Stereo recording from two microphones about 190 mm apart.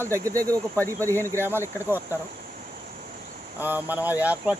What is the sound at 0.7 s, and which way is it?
Speech, 10° left (ahead or behind).